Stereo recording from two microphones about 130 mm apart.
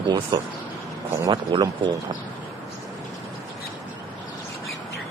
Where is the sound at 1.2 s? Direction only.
30° right (ahead or behind).